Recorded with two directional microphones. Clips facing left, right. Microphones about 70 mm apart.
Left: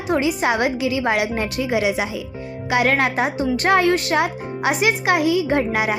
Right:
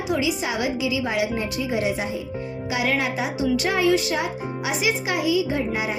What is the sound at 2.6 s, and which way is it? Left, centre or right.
Speech, left.